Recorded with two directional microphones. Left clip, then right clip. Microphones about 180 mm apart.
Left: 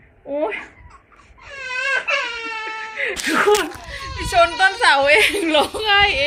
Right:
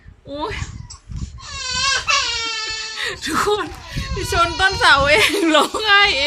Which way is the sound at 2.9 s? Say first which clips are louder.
Left 3 dB; 25° right (ahead or behind).